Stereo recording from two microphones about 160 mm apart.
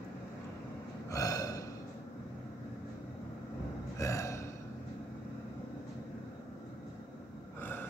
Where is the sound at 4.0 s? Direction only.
20° left (ahead or behind).